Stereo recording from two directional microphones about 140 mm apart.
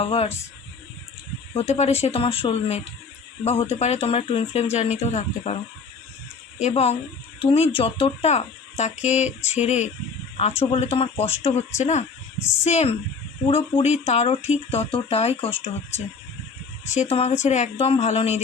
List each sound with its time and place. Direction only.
0.0 s speech: 45° left (ahead or behind)
1.5 s speech: 50° left (ahead or behind)